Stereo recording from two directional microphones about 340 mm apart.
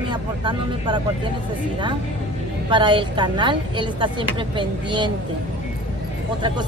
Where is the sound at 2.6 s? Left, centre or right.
Centre.